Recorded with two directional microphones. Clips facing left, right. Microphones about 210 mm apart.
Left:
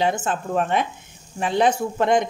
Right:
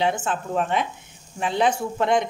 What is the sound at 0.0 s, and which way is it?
Speech, 40° left (ahead or behind).